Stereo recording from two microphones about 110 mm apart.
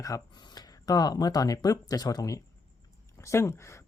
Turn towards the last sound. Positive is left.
turn(degrees=25)  # may be behind; listen again after turning